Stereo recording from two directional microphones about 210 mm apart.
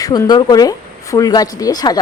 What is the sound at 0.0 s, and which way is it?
Speech, 15° left (ahead or behind).